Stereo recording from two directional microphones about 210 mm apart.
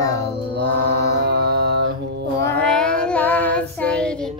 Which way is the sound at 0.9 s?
50° right (ahead or behind).